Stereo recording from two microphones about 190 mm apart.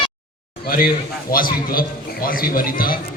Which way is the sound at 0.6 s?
50° left (ahead or behind).